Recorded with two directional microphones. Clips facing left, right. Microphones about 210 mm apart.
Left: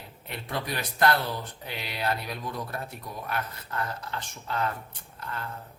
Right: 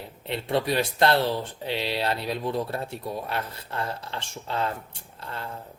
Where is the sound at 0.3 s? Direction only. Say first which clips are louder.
Right 8 dB; 25° right (ahead or behind).